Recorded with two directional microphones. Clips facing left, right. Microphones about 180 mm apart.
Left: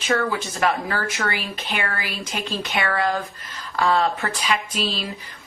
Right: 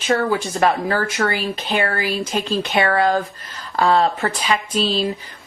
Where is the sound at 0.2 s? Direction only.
35° right (ahead or behind).